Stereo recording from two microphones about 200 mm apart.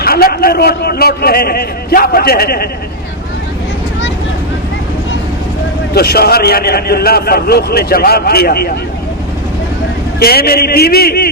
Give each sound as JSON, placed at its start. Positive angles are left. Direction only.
{"t": 0.0, "sound": "a man's voice", "side_deg": 50}
{"t": 5.9, "sound": "a man's voice", "side_deg": 50}
{"t": 10.2, "sound": "a man's voice", "side_deg": 50}